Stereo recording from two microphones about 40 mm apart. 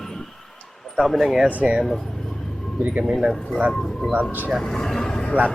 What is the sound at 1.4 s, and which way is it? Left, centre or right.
Speech, right.